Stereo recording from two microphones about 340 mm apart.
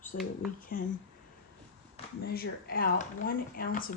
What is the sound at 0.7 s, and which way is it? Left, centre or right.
Speech, left.